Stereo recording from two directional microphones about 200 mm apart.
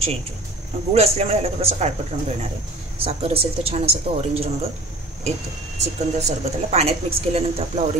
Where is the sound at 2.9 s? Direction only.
30° right (ahead or behind).